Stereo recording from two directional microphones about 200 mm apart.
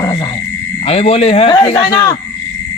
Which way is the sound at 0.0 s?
20° left (ahead or behind).